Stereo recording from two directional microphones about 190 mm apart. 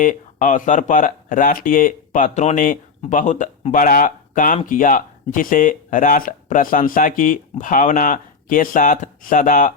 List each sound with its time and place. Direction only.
0.0 s speech: 45° left (ahead or behind)